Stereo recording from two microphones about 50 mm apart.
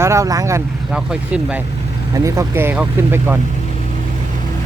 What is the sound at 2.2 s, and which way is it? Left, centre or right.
Speech, right.